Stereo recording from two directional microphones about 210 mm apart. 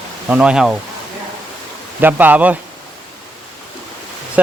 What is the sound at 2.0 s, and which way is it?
Speech, 10° right (ahead or behind).